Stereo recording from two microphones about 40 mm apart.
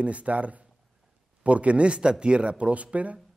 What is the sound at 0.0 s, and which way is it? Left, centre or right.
Speech, right.